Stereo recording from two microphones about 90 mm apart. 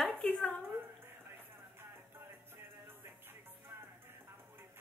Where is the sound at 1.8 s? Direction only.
25° right (ahead or behind).